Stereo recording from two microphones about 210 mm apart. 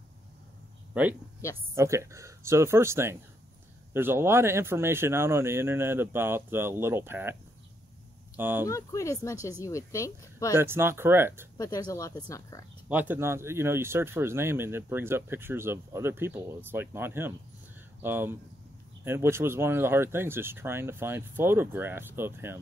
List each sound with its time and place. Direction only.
1.8 s speech: 15° right (ahead or behind)
8.4 s speech: 10° right (ahead or behind)
8.6 s speech: 15° left (ahead or behind)
10.5 s speech: 10° right (ahead or behind)
11.5 s speech: 15° left (ahead or behind)
12.8 s speech: 5° right (ahead or behind)